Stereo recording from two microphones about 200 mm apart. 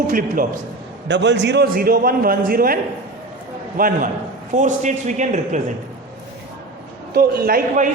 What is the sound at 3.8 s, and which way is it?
A man's voice, 40° right (ahead or behind).